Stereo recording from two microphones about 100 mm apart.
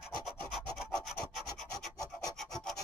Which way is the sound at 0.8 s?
Centre (ahead or behind).